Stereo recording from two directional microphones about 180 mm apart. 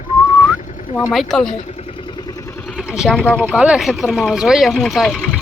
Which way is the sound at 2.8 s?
Centre (ahead or behind).